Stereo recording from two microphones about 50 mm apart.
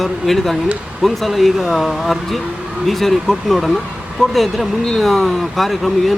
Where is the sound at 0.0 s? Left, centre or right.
Centre.